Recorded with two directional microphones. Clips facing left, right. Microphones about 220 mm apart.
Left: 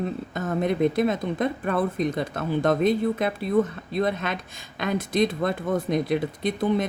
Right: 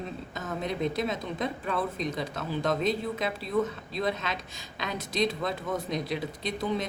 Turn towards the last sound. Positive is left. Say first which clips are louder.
# left 7 dB
turn(degrees=55)  # may be behind; listen again after turning